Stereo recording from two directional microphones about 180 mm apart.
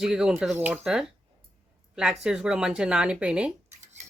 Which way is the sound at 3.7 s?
40° right (ahead or behind).